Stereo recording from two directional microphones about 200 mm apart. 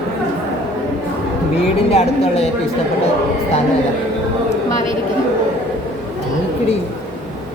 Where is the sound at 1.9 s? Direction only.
30° left (ahead or behind).